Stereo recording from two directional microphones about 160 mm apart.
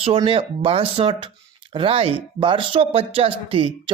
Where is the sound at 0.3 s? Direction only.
35° right (ahead or behind).